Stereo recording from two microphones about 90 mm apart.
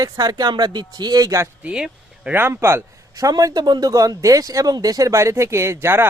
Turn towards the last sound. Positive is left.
turn(degrees=-30)  # may be behind; listen again after turning